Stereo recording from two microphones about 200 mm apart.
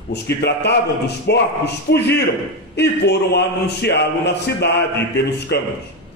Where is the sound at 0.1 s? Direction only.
55° left (ahead or behind).